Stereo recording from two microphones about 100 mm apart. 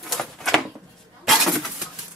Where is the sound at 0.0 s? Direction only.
Centre (ahead or behind).